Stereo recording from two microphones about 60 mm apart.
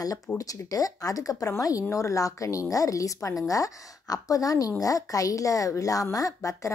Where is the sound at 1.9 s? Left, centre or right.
Left.